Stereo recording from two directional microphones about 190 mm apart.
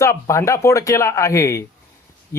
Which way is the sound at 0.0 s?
15° left (ahead or behind).